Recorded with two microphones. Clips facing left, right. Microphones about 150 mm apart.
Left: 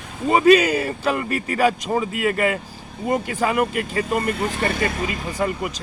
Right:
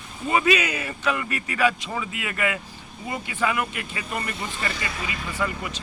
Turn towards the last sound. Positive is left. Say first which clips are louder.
# left 5 dB
turn(degrees=45)  # may be behind; listen again after turning